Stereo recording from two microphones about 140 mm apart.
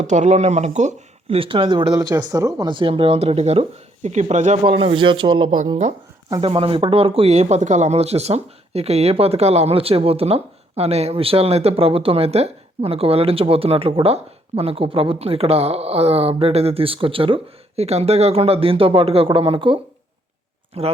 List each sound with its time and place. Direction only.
0.0 s speech: 55° right (ahead or behind)
1.4 s speech: 40° right (ahead or behind)
20.8 s speech: 45° right (ahead or behind)